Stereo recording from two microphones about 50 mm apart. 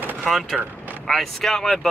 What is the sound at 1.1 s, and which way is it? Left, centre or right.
Speech, centre.